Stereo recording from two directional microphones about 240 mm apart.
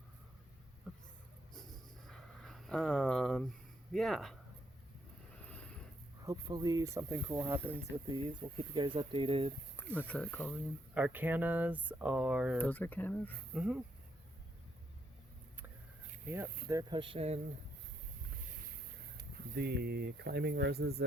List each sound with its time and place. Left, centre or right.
0.9 s speech: centre
1.5 s a sound: centre
3.9 s speech: centre
5.5 s a sound: centre
6.2 s speech: centre
9.7 s speech: centre
10.9 s speech: centre
12.5 s speech: centre
13.5 s speech: centre
16.6 s speech: centre
19.5 s speech: right